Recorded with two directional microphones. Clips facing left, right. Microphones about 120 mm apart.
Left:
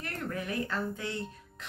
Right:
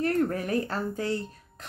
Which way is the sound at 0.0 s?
35° right (ahead or behind).